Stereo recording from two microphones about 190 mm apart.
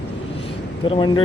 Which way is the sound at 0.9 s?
25° left (ahead or behind).